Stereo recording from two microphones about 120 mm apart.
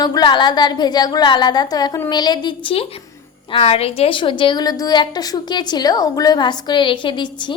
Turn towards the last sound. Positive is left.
turn(degrees=40)  # may be behind; listen again after turning